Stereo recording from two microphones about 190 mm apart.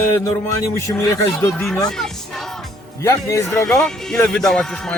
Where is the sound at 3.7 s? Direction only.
5° left (ahead or behind).